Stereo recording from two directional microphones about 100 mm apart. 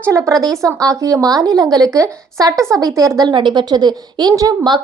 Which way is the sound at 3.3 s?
50° right (ahead or behind).